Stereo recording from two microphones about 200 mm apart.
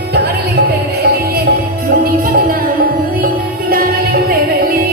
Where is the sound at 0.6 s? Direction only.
55° right (ahead or behind).